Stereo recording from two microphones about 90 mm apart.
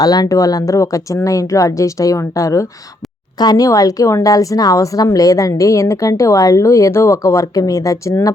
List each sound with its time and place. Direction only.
0.0 s speech: 45° left (ahead or behind)